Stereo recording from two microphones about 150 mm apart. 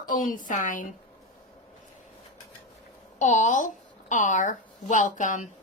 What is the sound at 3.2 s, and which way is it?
A woman's voice, 55° left (ahead or behind).